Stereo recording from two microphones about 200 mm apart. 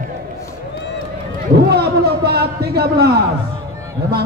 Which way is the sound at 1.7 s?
55° right (ahead or behind).